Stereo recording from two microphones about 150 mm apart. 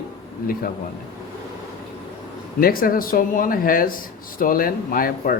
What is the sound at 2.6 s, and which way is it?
Speech, 75° left (ahead or behind).